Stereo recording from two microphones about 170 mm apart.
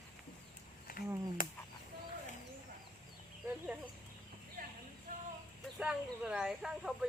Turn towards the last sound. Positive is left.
turn(degrees=-5)  # may be behind; listen again after turning